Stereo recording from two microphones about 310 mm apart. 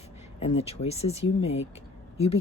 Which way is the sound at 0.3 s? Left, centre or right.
Centre.